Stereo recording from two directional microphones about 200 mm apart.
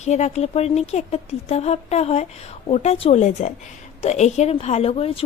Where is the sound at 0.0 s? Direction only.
35° left (ahead or behind).